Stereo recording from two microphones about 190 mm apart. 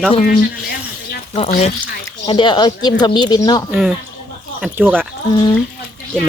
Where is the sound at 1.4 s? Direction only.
30° left (ahead or behind).